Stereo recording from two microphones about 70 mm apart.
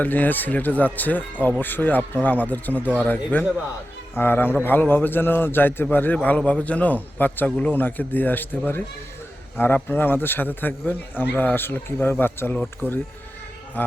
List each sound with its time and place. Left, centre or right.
0.0 s speech: left